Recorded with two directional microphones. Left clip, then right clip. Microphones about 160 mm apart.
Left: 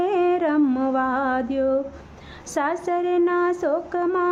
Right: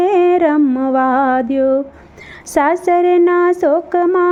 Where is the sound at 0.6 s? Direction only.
25° right (ahead or behind).